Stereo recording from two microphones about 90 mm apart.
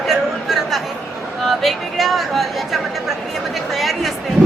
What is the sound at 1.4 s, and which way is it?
Speech, centre (ahead or behind).